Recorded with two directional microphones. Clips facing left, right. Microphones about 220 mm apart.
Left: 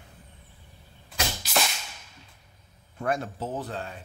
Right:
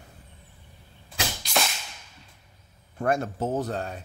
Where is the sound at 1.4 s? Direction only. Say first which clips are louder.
Right 1 dB; centre (ahead or behind).